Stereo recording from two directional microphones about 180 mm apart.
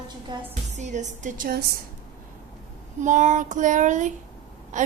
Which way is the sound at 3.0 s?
45° right (ahead or behind).